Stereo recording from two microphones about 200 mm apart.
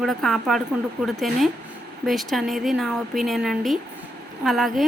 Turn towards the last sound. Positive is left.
turn(degrees=0)  # may be behind; listen again after turning